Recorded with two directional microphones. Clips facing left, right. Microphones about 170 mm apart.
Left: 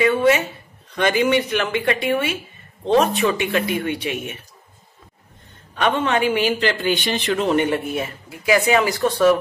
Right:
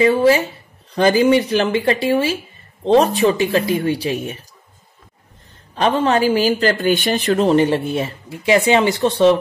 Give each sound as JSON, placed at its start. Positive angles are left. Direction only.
{"t": 0.0, "sound": "speech", "side_deg": -30}
{"t": 5.8, "sound": "speech", "side_deg": -35}